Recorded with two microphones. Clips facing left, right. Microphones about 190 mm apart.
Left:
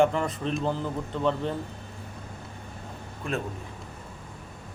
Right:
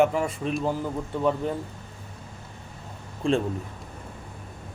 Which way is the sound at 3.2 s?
25° right (ahead or behind).